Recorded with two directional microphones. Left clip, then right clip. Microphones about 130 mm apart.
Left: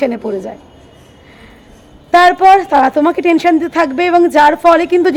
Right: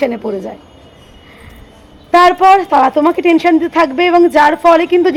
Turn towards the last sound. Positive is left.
turn(degrees=20)  # may be behind; listen again after turning